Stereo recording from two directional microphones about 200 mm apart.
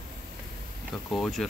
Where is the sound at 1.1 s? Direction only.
Centre (ahead or behind).